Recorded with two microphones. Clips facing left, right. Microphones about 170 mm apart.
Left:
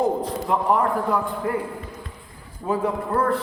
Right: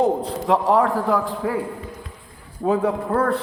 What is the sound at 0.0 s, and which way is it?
A man's voice, 90° right.